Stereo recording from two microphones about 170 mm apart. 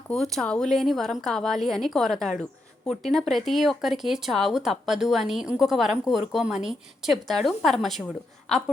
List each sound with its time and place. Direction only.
0.1 s a woman's voice: centre (ahead or behind)